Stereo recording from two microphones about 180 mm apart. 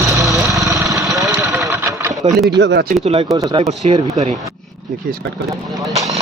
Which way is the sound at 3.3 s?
20° right (ahead or behind).